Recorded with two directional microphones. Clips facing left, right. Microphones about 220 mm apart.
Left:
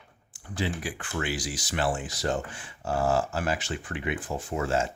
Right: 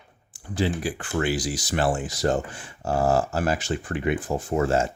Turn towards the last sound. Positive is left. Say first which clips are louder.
# right 5 dB
turn(degrees=-45)  # may be behind; listen again after turning